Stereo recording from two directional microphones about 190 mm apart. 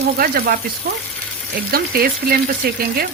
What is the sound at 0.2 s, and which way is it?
Speech, 50° right (ahead or behind).